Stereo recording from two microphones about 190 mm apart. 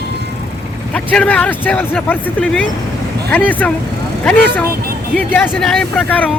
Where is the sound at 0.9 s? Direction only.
5° left (ahead or behind).